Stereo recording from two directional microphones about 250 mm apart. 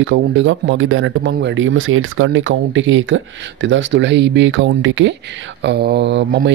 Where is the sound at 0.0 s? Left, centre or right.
Right.